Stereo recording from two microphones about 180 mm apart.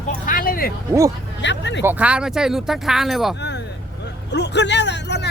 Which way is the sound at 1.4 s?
80° left.